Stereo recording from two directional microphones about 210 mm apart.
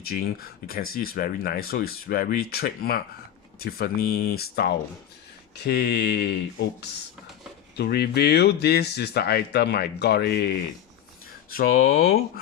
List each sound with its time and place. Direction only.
0.0 s speech: 45° left (ahead or behind)
7.8 s speech: 50° left (ahead or behind)